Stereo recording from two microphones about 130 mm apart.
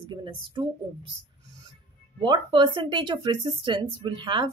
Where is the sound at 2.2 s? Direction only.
40° right (ahead or behind).